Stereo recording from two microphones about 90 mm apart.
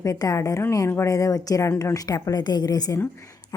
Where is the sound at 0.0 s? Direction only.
40° left (ahead or behind).